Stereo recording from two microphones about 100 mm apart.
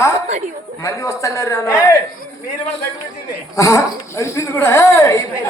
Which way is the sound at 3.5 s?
30° left (ahead or behind).